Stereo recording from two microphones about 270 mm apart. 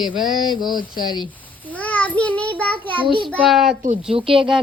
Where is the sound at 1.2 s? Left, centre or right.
Centre.